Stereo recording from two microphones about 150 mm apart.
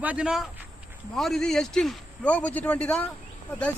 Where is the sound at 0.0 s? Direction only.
10° right (ahead or behind).